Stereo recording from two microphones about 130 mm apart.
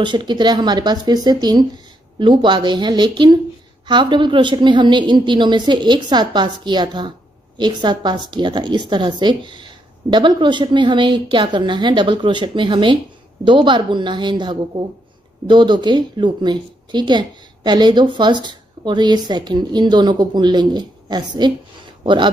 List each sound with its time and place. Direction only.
0.0 s a woman's voice: 35° right (ahead or behind)